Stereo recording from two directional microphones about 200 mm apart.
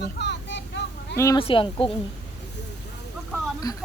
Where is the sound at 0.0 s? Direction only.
60° left (ahead or behind).